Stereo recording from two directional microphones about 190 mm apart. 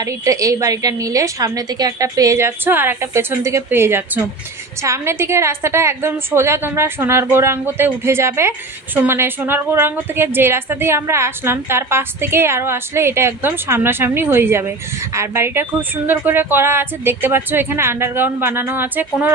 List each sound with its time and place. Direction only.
0.0 s a woman's voice: 15° right (ahead or behind)